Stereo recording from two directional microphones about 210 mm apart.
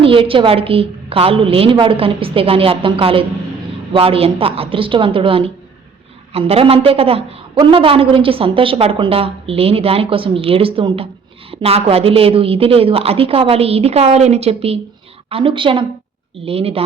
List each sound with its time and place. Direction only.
0.0 s a woman's voice: 25° right (ahead or behind)